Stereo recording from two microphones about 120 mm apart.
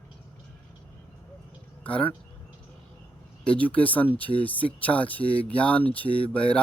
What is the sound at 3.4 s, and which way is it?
Speech, 10° left (ahead or behind).